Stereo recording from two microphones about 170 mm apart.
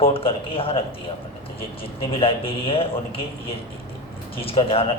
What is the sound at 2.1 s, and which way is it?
A man's voice, 35° left (ahead or behind).